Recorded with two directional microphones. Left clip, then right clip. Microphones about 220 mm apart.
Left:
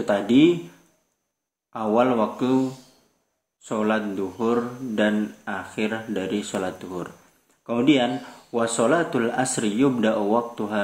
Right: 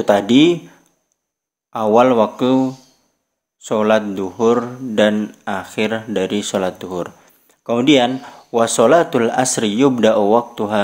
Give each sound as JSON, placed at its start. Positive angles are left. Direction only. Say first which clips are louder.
{"t": 0.0, "sound": "speech", "louder": "right 6 dB", "side_deg": -45}
{"t": 1.7, "sound": "speech", "louder": "right 8 dB", "side_deg": -45}
{"t": 3.6, "sound": "speech", "louder": "right 9 dB", "side_deg": -45}